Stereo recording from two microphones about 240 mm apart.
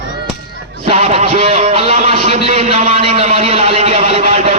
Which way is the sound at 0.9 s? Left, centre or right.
Right.